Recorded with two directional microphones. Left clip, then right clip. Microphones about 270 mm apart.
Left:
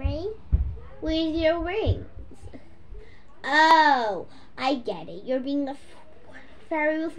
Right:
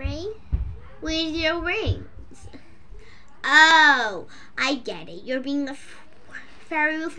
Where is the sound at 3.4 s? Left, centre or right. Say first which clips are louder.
Right 3 dB; centre.